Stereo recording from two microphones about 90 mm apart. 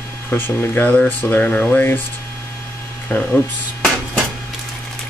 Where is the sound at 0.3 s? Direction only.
20° left (ahead or behind).